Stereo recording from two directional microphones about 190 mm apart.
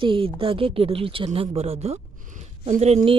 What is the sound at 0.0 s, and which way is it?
Speech, 30° right (ahead or behind).